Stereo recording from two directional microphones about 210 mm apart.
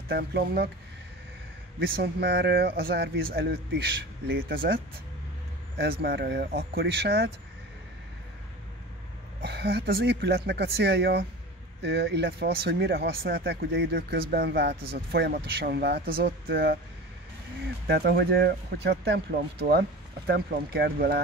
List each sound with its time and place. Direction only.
0.1 s speech: 50° right (ahead or behind)
1.8 s speech: 50° right (ahead or behind)
9.4 s speech: 50° right (ahead or behind)
17.8 s speech: 50° right (ahead or behind)
20.2 s speech: 50° right (ahead or behind)